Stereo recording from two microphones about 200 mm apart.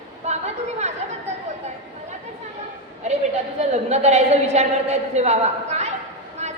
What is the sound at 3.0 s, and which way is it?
A woman's voice, 35° right (ahead or behind).